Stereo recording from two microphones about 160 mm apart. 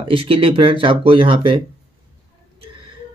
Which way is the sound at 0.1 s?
35° right (ahead or behind).